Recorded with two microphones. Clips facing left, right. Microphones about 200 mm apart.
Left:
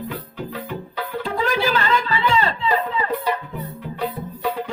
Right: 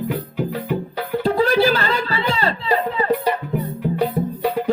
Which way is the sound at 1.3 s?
35° right (ahead or behind).